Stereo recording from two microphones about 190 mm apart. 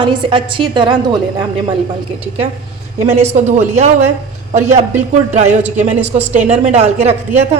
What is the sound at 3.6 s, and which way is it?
Speech, 35° right (ahead or behind).